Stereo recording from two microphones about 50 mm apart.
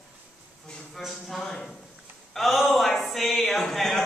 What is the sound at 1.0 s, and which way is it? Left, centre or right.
Speech, centre.